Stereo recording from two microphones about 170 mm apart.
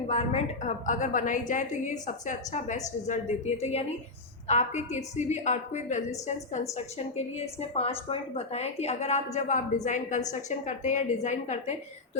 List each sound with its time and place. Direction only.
0.1 s a woman's voice: 40° left (ahead or behind)